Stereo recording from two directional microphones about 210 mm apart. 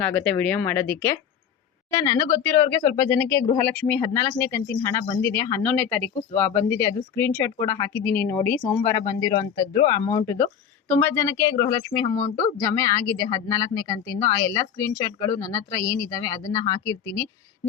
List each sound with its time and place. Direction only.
0.0 s speech: 5° left (ahead or behind)